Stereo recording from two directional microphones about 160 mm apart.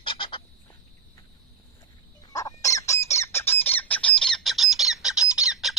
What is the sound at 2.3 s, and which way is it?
Squawk, 20° left (ahead or behind).